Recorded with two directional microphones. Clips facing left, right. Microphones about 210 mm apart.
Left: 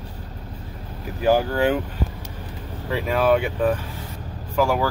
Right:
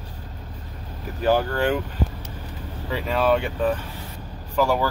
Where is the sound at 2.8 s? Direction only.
5° left (ahead or behind).